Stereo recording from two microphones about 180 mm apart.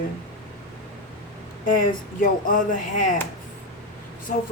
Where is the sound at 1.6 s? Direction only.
50° left (ahead or behind).